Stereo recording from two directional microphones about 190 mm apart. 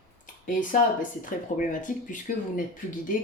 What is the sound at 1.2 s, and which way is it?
Speech, 45° left (ahead or behind).